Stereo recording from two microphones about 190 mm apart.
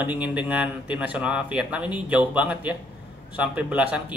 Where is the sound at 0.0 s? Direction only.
5° right (ahead or behind).